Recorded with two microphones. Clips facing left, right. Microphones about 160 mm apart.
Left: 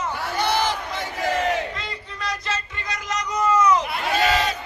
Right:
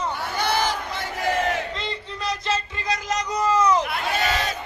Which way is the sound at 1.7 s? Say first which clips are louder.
Right 3 dB; 25° right (ahead or behind).